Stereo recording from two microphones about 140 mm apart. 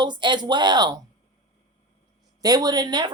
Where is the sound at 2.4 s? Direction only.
30° right (ahead or behind).